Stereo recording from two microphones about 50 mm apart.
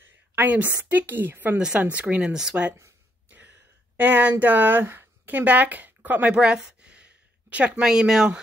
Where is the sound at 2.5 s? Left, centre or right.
Right.